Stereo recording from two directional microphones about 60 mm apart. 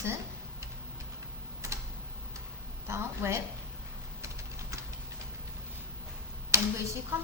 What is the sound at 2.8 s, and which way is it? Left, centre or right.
Speech, right.